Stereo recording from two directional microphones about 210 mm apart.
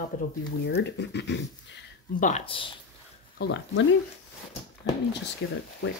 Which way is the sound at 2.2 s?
30° left (ahead or behind).